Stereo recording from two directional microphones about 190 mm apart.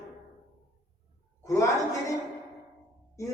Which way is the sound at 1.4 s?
15° left (ahead or behind).